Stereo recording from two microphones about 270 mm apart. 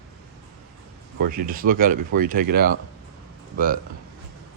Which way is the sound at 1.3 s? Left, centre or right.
Right.